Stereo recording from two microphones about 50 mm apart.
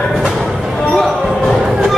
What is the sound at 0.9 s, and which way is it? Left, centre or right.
Basketball bounce, centre.